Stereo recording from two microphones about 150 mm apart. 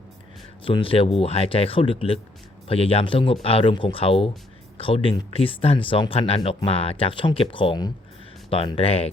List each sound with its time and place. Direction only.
0.6 s speech: 35° left (ahead or behind)
5.3 s speech: 35° left (ahead or behind)